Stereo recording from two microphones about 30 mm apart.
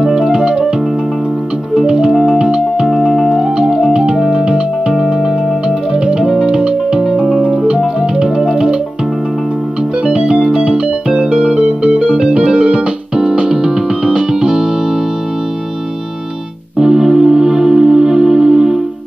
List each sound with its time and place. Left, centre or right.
0.4 s keyboard: right
1.9 s music: right
6.4 s music: right
7.8 s music: right
10.1 s music: right
10.4 s keyboard: right
11.4 s music: right
12.1 s music: centre
12.6 s music: right
16.7 s music: centre